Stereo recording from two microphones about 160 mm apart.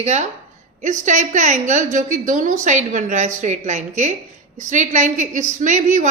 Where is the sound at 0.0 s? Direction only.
45° right (ahead or behind).